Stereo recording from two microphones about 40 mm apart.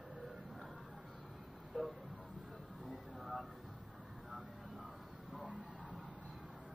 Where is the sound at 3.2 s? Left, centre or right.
Centre.